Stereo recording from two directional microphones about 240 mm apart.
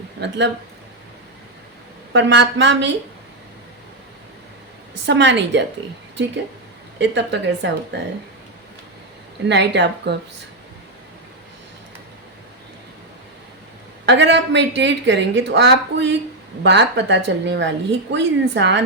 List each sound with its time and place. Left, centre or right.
0.2 s speech: right
2.1 s speech: right
5.0 s speech: right
7.0 s speech: right
9.5 s speech: right
14.0 s speech: right